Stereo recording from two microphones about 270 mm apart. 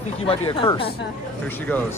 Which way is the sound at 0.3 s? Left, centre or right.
Centre.